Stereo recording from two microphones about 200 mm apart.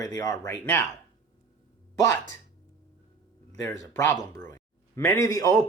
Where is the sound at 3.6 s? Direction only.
15° left (ahead or behind).